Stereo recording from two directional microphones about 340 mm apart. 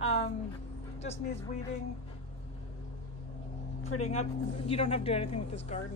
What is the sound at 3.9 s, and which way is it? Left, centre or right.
A woman's voice, centre.